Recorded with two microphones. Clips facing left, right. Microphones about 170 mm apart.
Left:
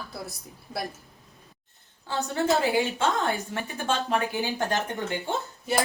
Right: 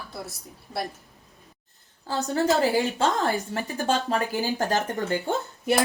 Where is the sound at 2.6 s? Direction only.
40° right (ahead or behind).